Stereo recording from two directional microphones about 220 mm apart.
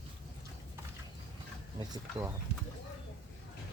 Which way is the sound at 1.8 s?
15° right (ahead or behind).